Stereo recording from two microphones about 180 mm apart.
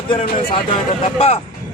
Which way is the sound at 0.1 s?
30° left (ahead or behind).